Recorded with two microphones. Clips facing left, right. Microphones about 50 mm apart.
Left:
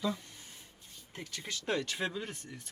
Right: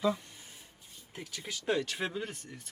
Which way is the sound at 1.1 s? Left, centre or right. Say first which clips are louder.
Even; centre.